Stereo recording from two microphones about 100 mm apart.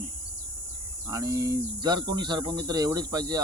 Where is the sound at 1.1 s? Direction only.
35° right (ahead or behind).